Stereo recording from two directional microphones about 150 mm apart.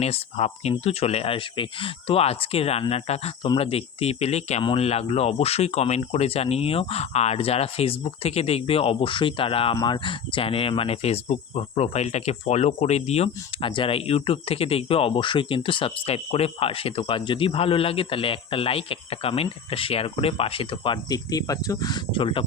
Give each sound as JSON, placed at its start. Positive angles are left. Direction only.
{"t": 0.0, "sound": "speech", "side_deg": 45}